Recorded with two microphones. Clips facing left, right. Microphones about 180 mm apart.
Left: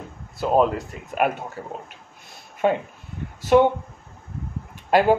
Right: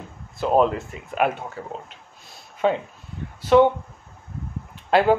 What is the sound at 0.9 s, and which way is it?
Speech, 45° left (ahead or behind).